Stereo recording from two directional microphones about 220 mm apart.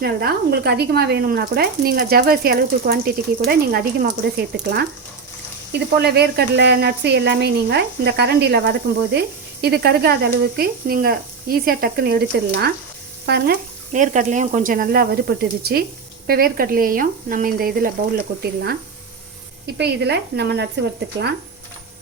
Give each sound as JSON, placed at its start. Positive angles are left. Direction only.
{"t": 0.0, "sound": "speech", "side_deg": -45}
{"t": 13.9, "sound": "speech", "side_deg": -35}
{"t": 19.6, "sound": "speech", "side_deg": -50}